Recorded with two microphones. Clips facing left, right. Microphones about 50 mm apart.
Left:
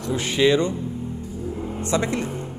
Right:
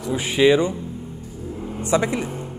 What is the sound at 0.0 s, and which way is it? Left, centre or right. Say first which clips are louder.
Speech: right 2 dB; centre.